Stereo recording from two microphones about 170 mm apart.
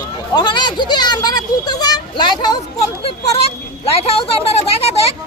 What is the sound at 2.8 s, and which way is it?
Speech, 35° left (ahead or behind).